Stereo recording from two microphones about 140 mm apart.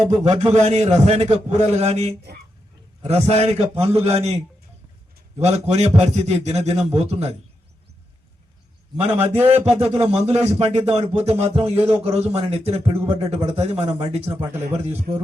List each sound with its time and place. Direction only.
0.0 s speech: 50° right (ahead or behind)
5.4 s speech: 50° right (ahead or behind)
9.0 s speech: 50° right (ahead or behind)